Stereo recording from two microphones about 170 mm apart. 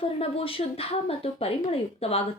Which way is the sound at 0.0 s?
35° left (ahead or behind).